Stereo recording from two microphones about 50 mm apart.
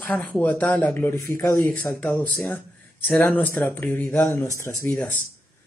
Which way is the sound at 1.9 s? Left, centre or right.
Left.